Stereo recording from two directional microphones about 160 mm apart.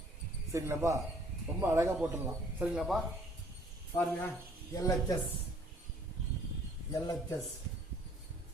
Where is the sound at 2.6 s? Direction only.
5° right (ahead or behind).